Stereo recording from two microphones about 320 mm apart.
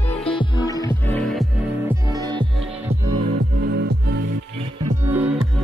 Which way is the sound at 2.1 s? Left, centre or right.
Centre.